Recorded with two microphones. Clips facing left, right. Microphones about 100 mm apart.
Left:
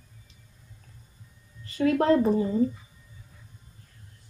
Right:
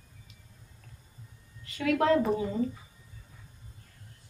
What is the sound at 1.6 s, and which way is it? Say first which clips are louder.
Speech: left 3 dB; 35° left (ahead or behind).